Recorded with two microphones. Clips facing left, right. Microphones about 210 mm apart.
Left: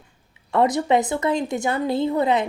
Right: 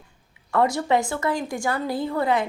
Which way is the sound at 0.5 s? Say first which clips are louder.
Left 2 dB; 20° left (ahead or behind).